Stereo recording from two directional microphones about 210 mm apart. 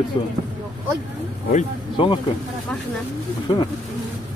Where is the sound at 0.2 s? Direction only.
25° left (ahead or behind).